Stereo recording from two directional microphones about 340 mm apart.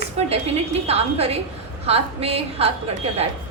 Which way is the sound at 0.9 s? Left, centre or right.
Centre.